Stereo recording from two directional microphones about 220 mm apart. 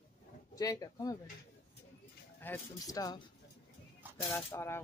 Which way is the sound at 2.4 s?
10° left (ahead or behind).